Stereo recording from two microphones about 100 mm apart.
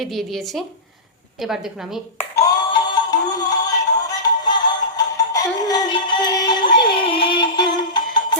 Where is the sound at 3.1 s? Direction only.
40° left (ahead or behind).